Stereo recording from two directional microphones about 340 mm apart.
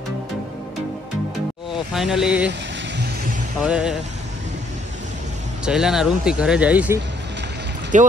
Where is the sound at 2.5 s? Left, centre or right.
Right.